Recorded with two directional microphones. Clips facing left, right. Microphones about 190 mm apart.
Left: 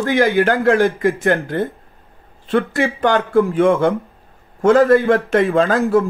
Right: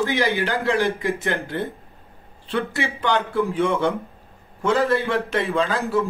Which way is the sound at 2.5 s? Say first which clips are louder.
Left 7 dB; 50° left (ahead or behind).